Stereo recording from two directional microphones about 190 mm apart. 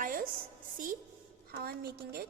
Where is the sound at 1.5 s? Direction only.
55° right (ahead or behind).